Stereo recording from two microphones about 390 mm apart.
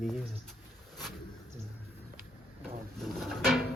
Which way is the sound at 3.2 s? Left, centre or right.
Centre.